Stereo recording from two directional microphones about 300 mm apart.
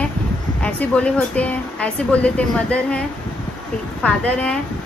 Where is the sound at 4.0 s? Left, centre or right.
Centre.